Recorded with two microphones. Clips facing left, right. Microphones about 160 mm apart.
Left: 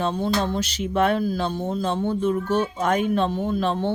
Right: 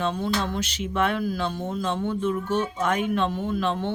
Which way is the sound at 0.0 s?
35° left (ahead or behind).